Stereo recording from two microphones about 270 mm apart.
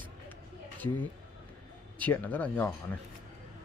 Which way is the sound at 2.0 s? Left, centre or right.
Centre.